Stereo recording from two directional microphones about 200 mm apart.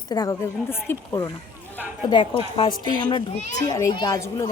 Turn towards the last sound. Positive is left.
turn(degrees=20)  # may be behind; listen again after turning